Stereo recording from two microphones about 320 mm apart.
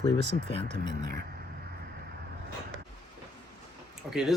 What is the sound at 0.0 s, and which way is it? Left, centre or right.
Speech, centre.